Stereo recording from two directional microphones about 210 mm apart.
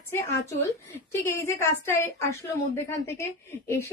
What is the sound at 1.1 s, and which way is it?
A woman's voice, 10° left (ahead or behind).